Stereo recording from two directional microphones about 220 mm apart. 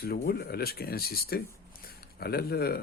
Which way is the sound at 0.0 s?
45° left (ahead or behind).